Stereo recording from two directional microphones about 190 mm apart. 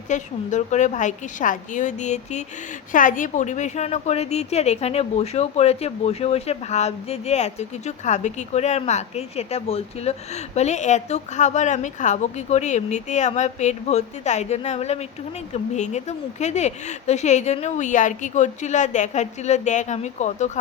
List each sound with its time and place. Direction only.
0.1 s a woman's voice: 40° left (ahead or behind)